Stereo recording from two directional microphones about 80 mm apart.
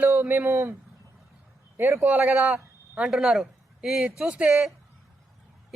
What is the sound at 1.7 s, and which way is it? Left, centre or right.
Speech, right.